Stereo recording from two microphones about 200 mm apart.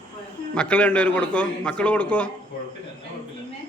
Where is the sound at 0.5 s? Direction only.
5° left (ahead or behind).